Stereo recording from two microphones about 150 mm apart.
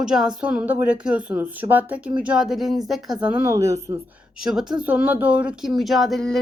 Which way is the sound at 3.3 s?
20° right (ahead or behind).